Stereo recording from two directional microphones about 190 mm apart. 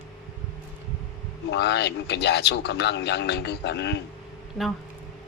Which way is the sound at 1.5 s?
60° left (ahead or behind).